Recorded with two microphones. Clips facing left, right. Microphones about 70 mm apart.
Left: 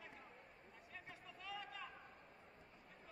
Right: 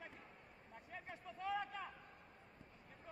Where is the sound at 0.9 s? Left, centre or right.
Right.